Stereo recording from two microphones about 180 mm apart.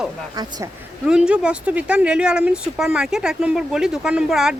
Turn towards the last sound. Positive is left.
turn(degrees=-5)  # may be behind; listen again after turning